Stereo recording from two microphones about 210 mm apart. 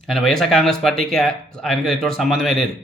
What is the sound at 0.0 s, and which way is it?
Speech, centre (ahead or behind).